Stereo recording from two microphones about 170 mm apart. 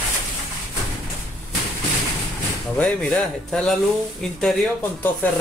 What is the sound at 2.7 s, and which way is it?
Speech, 5° left (ahead or behind).